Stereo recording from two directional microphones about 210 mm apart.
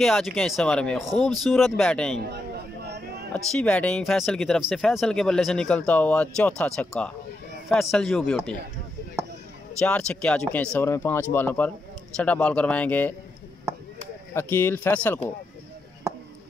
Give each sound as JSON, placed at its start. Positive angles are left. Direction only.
{"t": 0.0, "sound": "speech", "side_deg": 0}
{"t": 2.2, "sound": "chatter", "side_deg": -50}
{"t": 3.3, "sound": "speech", "side_deg": 5}
{"t": 9.8, "sound": "speech", "side_deg": 5}
{"t": 14.3, "sound": "speech", "side_deg": 10}